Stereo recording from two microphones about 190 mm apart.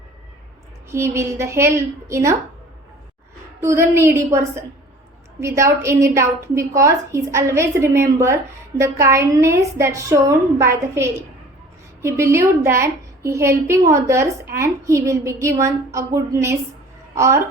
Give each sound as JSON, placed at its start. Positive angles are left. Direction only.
{"t": 0.9, "sound": "a woman's voice", "side_deg": -15}
{"t": 3.6, "sound": "a woman's voice", "side_deg": -15}